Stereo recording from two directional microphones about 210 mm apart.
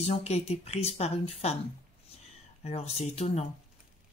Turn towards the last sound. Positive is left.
turn(degrees=30)  # may be behind; listen again after turning